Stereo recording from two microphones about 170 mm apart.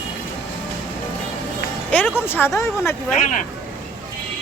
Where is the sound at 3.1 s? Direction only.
50° left (ahead or behind).